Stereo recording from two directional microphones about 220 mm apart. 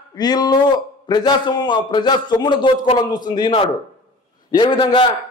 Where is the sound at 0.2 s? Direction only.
20° left (ahead or behind).